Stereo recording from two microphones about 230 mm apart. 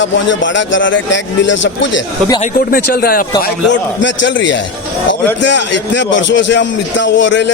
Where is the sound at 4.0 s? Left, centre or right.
Left.